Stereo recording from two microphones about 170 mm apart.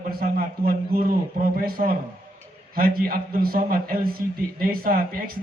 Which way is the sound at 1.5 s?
60° right (ahead or behind).